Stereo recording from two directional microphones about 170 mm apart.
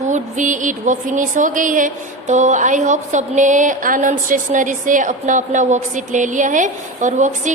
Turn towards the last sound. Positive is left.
turn(degrees=-45)  # may be behind; listen again after turning